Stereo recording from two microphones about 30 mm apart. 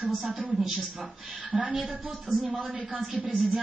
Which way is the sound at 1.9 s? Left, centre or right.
Right.